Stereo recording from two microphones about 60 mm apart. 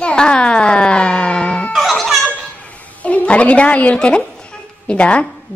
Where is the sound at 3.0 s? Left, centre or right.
Left.